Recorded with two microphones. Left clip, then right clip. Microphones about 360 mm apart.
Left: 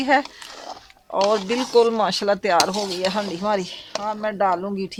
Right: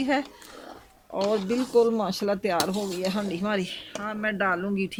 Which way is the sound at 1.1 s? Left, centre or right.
Left.